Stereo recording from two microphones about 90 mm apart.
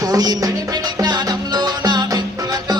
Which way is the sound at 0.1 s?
45° right (ahead or behind).